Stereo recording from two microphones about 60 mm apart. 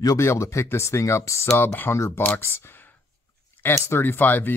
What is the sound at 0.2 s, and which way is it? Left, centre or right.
Speech, left.